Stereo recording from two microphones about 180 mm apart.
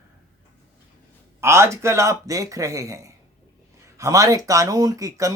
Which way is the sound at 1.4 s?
15° right (ahead or behind).